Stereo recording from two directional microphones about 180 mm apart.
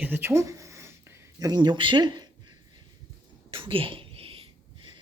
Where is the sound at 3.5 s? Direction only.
30° right (ahead or behind).